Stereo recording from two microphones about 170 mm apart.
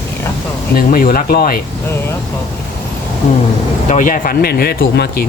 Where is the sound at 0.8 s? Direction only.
60° left (ahead or behind).